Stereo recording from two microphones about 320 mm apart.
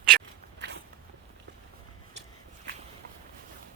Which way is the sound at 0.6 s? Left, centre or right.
Right.